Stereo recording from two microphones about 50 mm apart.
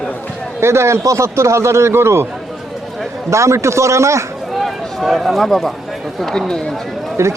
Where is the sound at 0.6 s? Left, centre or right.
Right.